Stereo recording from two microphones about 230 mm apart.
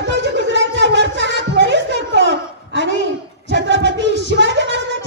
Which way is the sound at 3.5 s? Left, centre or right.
Right.